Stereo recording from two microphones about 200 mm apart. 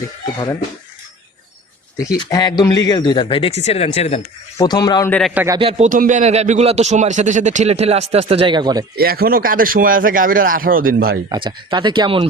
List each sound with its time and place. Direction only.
2.1 s speech: 20° left (ahead or behind)
4.5 s speech: 20° left (ahead or behind)
5.3 s a man's voice: 10° right (ahead or behind)
5.5 s a man's voice: 30° right (ahead or behind)
9.0 s speech: 50° right (ahead or behind)
11.3 s speech: 25° right (ahead or behind)